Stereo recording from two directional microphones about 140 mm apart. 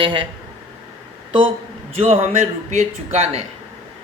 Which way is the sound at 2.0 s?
55° right (ahead or behind).